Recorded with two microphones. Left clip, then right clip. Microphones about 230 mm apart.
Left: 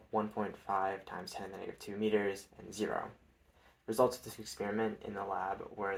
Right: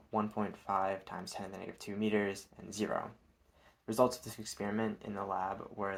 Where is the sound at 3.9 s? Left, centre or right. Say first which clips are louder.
Even; right.